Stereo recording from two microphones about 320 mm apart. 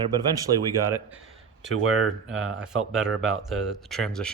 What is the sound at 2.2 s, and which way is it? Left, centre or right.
Speech, centre.